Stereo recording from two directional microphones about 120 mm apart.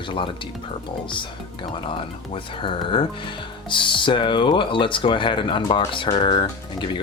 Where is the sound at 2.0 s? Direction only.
45° left (ahead or behind).